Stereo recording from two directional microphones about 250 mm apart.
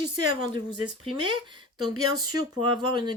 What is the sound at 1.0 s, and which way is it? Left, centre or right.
Speech, centre.